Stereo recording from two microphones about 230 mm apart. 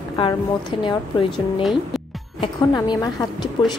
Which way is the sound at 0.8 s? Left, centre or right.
Left.